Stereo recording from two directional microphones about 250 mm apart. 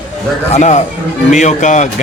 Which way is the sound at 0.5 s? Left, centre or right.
Left.